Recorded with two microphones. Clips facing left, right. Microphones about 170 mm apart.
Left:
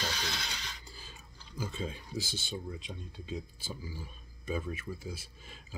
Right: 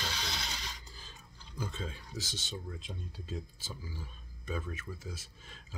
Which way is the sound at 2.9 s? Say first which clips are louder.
Left 2 dB; centre (ahead or behind).